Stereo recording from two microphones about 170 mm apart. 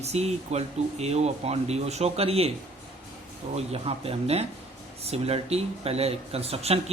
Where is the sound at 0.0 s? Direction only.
40° right (ahead or behind).